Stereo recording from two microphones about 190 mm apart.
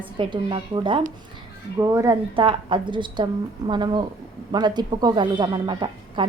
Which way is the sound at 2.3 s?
25° right (ahead or behind).